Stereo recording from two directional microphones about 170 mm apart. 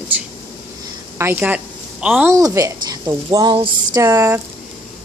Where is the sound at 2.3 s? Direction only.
20° right (ahead or behind).